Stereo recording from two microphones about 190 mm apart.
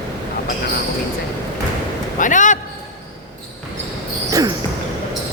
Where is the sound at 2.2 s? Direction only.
40° left (ahead or behind).